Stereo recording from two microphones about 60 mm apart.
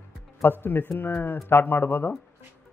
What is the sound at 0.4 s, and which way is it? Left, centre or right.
A man's voice, left.